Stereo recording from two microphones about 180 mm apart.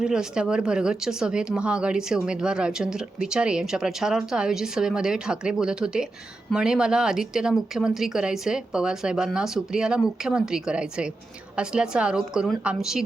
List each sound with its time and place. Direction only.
0.0 s speech: 5° right (ahead or behind)